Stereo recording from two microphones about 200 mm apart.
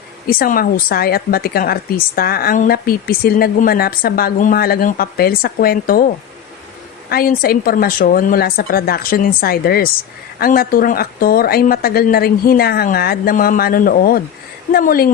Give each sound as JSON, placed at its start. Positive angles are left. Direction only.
{"t": 0.3, "sound": "speech", "side_deg": 45}
{"t": 7.1, "sound": "speech", "side_deg": 50}